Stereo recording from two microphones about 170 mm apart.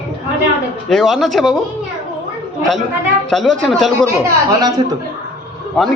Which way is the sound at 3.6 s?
Centre (ahead or behind).